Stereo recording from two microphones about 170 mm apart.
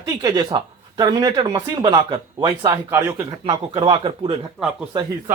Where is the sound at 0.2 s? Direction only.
20° right (ahead or behind).